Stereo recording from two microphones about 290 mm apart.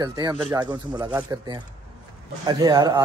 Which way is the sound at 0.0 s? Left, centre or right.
Centre.